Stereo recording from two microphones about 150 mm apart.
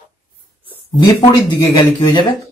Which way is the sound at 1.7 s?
30° left (ahead or behind).